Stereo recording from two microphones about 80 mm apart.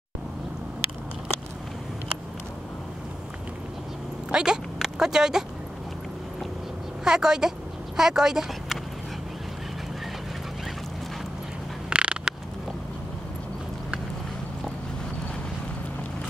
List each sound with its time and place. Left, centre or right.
4.3 s speech: centre
7.1 s speech: centre
11.9 s a sound: centre